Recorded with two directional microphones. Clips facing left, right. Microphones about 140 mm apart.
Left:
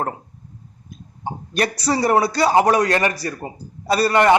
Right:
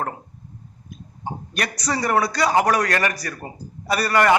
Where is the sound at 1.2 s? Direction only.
30° left (ahead or behind).